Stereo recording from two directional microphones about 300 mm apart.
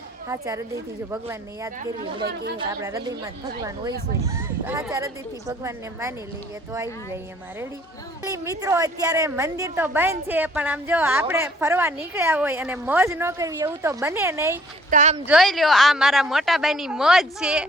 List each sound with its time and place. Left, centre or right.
0.3 s a woman's voice: centre
8.2 s a woman's voice: centre
14.8 s speech: right
15.3 s a woman's voice: centre